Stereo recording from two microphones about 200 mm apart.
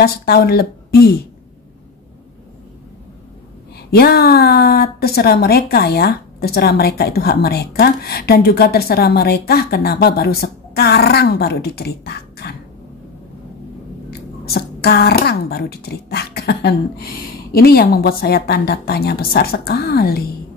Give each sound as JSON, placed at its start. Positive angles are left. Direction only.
{"t": 0.0, "sound": "speech", "side_deg": 50}
{"t": 3.9, "sound": "speech", "side_deg": 50}
{"t": 14.4, "sound": "speech", "side_deg": 50}